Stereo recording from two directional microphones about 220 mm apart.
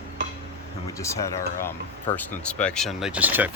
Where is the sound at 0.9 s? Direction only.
15° left (ahead or behind).